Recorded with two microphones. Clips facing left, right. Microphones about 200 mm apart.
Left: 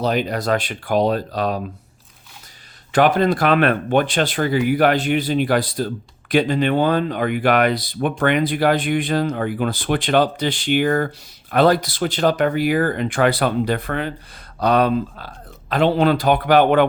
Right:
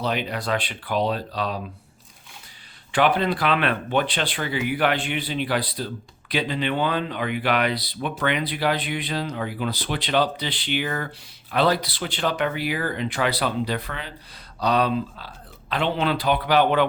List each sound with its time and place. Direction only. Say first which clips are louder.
0.0 s speech: left 6 dB; 40° left (ahead or behind)
2.9 s speech: left 5 dB; 45° left (ahead or behind)